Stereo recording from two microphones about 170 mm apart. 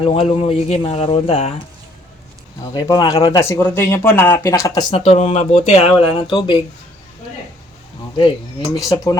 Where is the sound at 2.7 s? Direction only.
20° left (ahead or behind).